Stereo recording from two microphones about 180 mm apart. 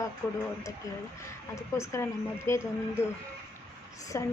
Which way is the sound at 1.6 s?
15° left (ahead or behind).